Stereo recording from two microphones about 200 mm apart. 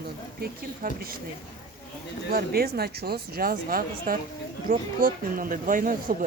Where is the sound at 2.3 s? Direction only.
50° right (ahead or behind).